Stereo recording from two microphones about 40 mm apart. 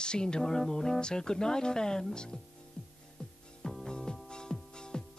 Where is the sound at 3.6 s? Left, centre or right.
Centre.